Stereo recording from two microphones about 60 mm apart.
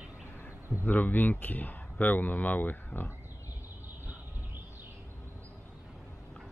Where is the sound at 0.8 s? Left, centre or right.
Left.